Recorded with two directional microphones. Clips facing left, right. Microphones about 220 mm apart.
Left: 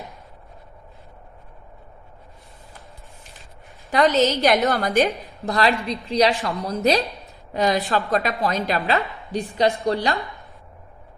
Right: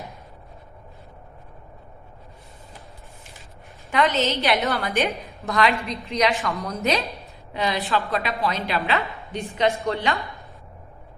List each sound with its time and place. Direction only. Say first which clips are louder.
3.9 s a woman's voice: left 4 dB; 40° left (ahead or behind)